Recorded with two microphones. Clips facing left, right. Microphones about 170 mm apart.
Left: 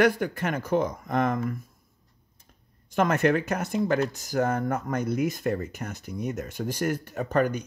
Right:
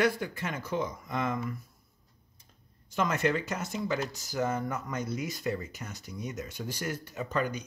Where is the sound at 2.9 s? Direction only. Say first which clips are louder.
Left 6 dB; 55° left (ahead or behind).